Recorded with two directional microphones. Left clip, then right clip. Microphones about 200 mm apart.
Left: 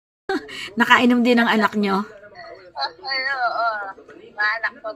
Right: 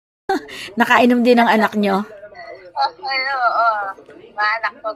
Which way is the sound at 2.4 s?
5° right (ahead or behind).